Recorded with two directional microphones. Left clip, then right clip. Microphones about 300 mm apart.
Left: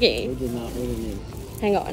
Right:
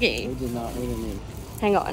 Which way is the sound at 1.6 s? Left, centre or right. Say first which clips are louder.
Right 1 dB; right.